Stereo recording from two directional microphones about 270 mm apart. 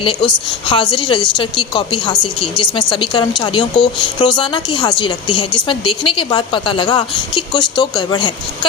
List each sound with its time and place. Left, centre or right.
0.0 s a woman's voice: centre